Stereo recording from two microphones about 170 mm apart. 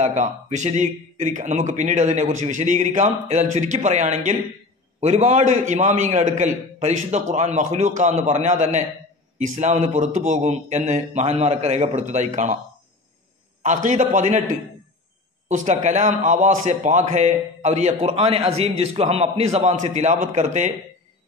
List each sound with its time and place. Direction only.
0.0 s a man's voice: 45° right (ahead or behind)
13.6 s a man's voice: 45° right (ahead or behind)